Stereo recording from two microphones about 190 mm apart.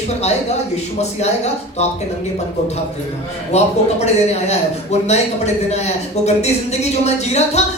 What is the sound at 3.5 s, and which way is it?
A man's voice, 35° left (ahead or behind).